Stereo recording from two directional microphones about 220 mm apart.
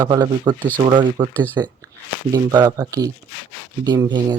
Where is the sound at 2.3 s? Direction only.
15° right (ahead or behind).